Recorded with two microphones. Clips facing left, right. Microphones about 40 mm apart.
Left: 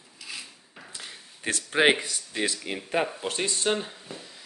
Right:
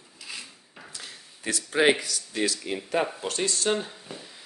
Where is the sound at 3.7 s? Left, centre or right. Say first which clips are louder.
Right 1 dB; centre.